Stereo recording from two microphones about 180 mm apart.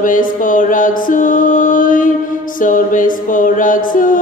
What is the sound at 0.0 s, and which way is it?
Music, 45° left (ahead or behind).